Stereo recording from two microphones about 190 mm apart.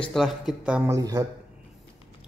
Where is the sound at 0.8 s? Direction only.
15° right (ahead or behind).